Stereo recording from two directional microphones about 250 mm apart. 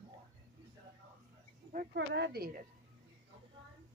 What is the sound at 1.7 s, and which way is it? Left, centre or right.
Speech, right.